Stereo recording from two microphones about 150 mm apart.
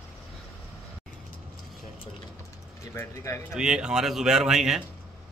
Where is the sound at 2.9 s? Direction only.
20° left (ahead or behind).